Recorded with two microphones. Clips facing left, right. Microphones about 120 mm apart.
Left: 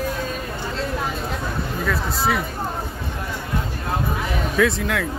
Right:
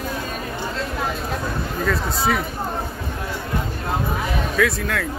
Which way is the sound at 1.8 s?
5° left (ahead or behind).